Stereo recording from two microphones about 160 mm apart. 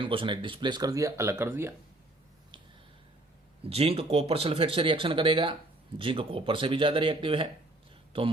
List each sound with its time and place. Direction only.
0.0 s speech: 35° right (ahead or behind); by 1.7 s 15° right (ahead or behind)
3.6 s speech: 40° right (ahead or behind)